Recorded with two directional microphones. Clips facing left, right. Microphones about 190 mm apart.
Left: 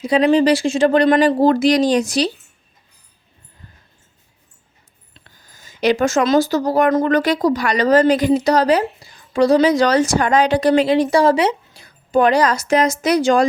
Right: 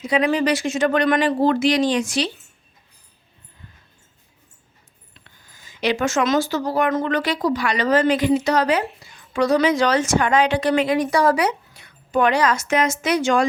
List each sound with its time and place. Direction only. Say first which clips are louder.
0.0 s speech: left 6 dB; 35° left (ahead or behind)
5.1 s speech: left 3 dB; 40° left (ahead or behind)